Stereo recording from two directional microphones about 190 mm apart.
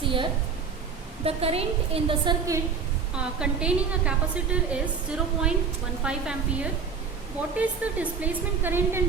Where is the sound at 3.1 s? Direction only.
5° right (ahead or behind).